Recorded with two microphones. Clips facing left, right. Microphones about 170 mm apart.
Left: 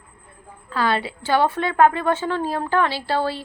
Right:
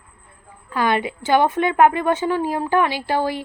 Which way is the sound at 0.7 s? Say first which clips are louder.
Right 2 dB; 15° right (ahead or behind).